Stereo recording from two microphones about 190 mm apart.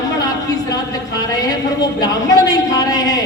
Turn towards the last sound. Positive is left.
turn(degrees=20)  # may be behind; listen again after turning